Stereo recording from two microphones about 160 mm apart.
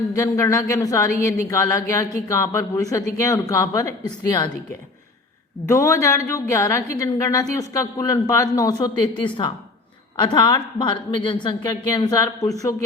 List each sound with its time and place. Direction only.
0.1 s a woman's voice: 20° left (ahead or behind)
5.6 s a woman's voice: 20° left (ahead or behind)